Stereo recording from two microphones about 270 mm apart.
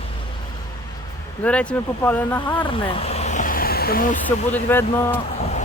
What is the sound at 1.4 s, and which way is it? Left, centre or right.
Speech, centre.